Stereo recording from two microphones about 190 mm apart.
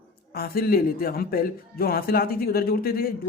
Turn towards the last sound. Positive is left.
turn(degrees=50)  # may be behind; listen again after turning